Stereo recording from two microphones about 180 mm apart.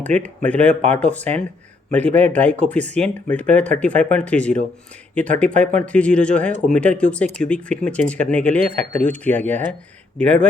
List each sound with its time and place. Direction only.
0.0 s speech: 5° left (ahead or behind)
2.0 s speech: 35° right (ahead or behind)
2.3 s speech: 10° left (ahead or behind)